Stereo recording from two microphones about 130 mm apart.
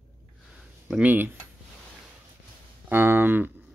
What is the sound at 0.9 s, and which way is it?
Speech, 10° right (ahead or behind).